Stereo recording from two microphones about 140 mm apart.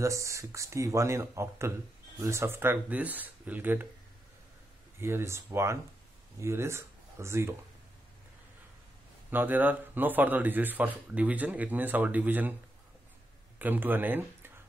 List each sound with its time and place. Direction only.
0.0 s speech: 20° right (ahead or behind)
5.0 s speech: 20° right (ahead or behind)
9.3 s speech: 15° right (ahead or behind)
13.6 s speech: 15° right (ahead or behind)